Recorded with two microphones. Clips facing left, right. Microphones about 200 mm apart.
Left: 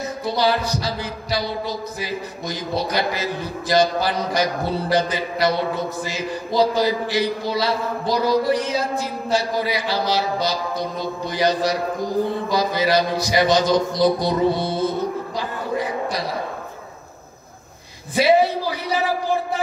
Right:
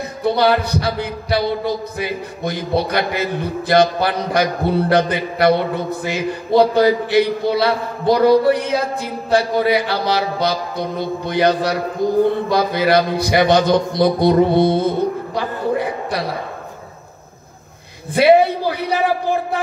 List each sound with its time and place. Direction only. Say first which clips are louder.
0.2 s speech: right 5 dB; 60° right (ahead or behind)
15.3 s a sound: right 5 dB; 60° right (ahead or behind)
18.1 s speech: right 4 dB; 60° right (ahead or behind)